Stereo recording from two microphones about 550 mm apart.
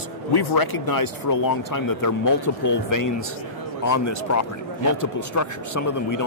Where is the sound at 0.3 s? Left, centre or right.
Left.